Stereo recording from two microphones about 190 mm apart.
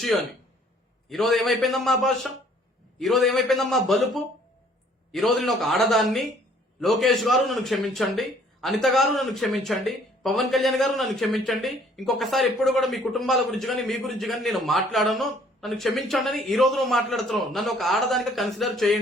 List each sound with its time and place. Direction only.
0.0 s a man's voice: centre (ahead or behind)